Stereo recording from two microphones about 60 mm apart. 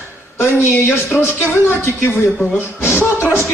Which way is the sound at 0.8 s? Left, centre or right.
Left.